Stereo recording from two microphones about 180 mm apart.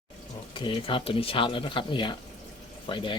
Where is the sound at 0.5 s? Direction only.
30° left (ahead or behind).